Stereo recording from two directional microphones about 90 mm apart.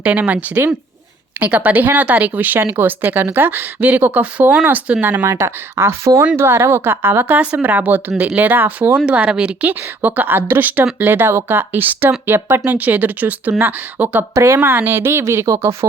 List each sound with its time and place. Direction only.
0.0 s a woman's voice: 15° right (ahead or behind)
5.2 s a woman's voice: 30° right (ahead or behind)